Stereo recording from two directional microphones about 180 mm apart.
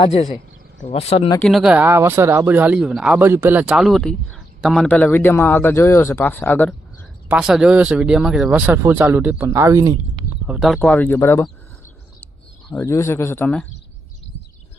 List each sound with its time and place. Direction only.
0.0 s speech: 35° left (ahead or behind)
1.4 s a man's voice: centre (ahead or behind)
7.3 s speech: 5° right (ahead or behind)
10.4 s a man's voice: 5° right (ahead or behind)
12.7 s a man's voice: 15° left (ahead or behind)